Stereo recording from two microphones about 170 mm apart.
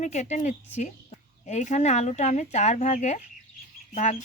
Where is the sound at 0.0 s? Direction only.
45° left (ahead or behind).